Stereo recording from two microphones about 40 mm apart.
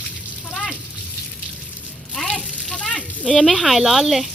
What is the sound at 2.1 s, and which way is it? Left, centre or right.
Frying, centre.